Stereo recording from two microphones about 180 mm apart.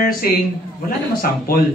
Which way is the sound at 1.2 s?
55° left (ahead or behind).